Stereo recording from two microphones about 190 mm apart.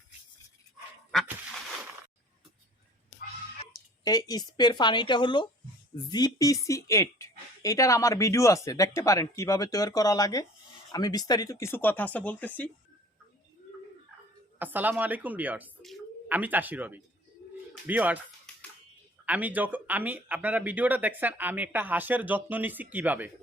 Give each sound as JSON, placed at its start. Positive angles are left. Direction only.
{"t": 3.7, "sound": "speech", "side_deg": 20}
{"t": 14.6, "sound": "speech", "side_deg": -10}
{"t": 19.2, "sound": "speech", "side_deg": -10}